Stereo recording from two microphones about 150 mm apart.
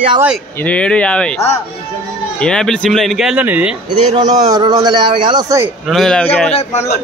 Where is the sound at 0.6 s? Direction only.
10° left (ahead or behind).